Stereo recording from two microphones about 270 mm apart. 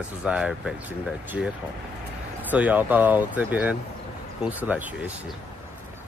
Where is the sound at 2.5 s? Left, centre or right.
Centre.